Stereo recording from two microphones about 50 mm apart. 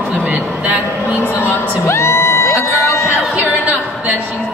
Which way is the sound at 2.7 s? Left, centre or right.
Left.